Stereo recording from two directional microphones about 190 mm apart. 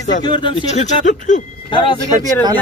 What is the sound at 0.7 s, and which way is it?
Speech, 40° left (ahead or behind).